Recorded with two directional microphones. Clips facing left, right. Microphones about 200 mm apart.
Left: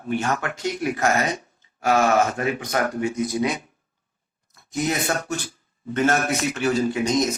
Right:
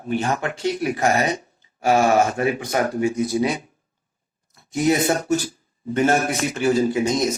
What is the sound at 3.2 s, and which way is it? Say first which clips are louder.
Speech: even; 30° right (ahead or behind).